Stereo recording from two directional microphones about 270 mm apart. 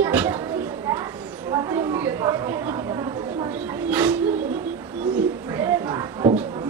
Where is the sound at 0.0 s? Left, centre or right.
Centre.